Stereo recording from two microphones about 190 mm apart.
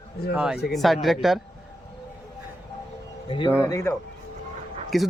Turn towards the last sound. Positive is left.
turn(degrees=0)  # may be behind; listen again after turning